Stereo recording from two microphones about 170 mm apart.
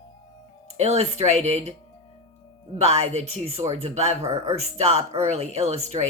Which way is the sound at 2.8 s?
40° right (ahead or behind).